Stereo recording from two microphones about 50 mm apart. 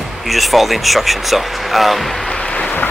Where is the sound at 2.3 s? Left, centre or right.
Left.